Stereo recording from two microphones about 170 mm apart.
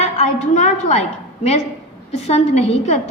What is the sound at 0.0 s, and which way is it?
Speech, 40° left (ahead or behind).